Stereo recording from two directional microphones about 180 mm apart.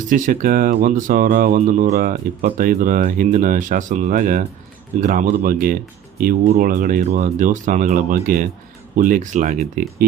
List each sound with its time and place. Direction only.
0.1 s speech: 50° right (ahead or behind)